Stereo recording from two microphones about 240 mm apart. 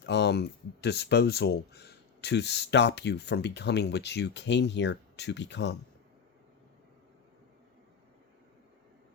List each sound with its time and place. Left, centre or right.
0.0 s speech: left